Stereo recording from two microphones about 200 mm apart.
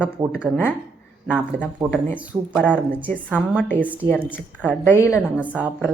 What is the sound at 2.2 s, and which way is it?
A woman's voice, centre (ahead or behind).